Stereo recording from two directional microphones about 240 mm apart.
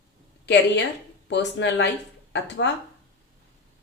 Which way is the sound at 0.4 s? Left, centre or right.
Left.